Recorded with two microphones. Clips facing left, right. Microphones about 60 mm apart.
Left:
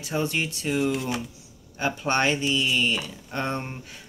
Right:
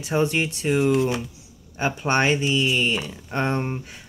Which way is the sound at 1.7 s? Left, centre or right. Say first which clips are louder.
Right 3 dB; right.